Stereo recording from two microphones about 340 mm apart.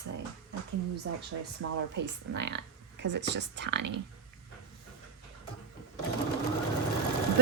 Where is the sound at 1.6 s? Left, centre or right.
Right.